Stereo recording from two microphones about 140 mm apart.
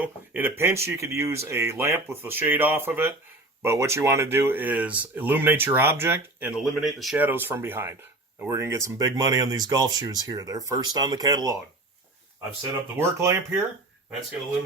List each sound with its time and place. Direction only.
0.0 s speech: 15° right (ahead or behind)
6.5 s speech: centre (ahead or behind)
7.3 s speech: 15° right (ahead or behind)
13.0 s speech: 20° right (ahead or behind)